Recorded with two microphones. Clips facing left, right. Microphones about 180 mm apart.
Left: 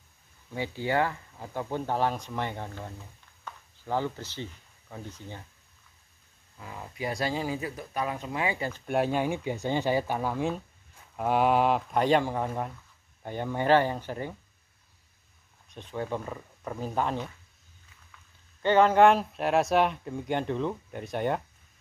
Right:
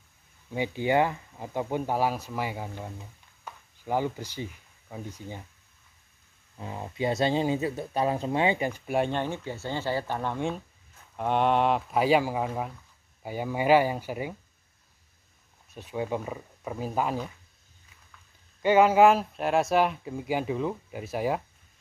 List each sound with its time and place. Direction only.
0.5 s speech: 15° right (ahead or behind)
6.5 s speech: 25° right (ahead or behind)
8.8 s speech: centre (ahead or behind)
15.7 s speech: 10° right (ahead or behind)
18.6 s speech: 10° right (ahead or behind)